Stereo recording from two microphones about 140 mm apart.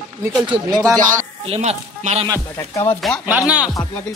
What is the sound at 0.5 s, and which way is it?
Speech, 25° right (ahead or behind).